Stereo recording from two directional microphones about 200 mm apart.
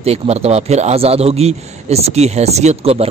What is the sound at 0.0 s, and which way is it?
A man's voice, 30° right (ahead or behind).